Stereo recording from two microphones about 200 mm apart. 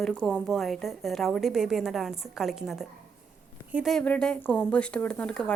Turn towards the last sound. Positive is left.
turn(degrees=5)  # may be behind; listen again after turning